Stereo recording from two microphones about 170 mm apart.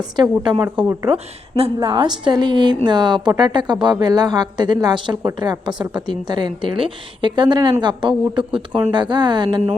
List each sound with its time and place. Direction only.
0.2 s a woman's voice: 25° right (ahead or behind)
0.6 s speech: 10° right (ahead or behind)
1.0 s a woman's voice: 35° right (ahead or behind)